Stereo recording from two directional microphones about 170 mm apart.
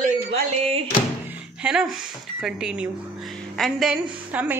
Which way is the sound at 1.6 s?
5° right (ahead or behind).